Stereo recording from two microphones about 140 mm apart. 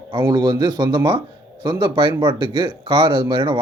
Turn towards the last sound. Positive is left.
turn(degrees=-35)  # may be behind; listen again after turning